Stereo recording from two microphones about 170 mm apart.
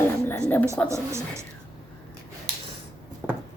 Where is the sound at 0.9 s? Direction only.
15° right (ahead or behind).